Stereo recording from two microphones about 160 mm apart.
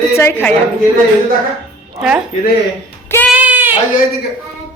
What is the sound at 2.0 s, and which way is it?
Speech, 5° right (ahead or behind).